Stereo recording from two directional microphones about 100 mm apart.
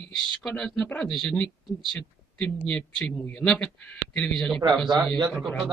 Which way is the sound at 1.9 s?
10° left (ahead or behind).